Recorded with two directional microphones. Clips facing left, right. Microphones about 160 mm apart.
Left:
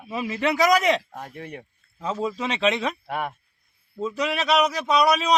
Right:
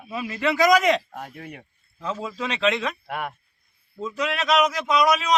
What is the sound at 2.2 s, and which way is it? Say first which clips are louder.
Speech: left 4 dB; 20° left (ahead or behind).